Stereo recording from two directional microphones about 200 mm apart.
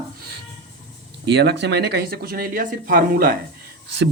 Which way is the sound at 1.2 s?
60° right (ahead or behind).